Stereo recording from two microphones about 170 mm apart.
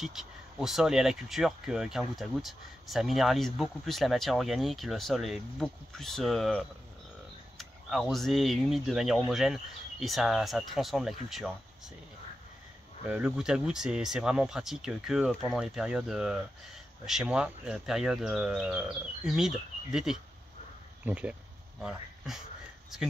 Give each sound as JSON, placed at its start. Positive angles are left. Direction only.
{"t": 0.0, "sound": "speech", "side_deg": 0}
{"t": 13.1, "sound": "speech", "side_deg": -5}